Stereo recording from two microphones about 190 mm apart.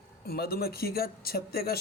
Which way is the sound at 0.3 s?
55° left (ahead or behind).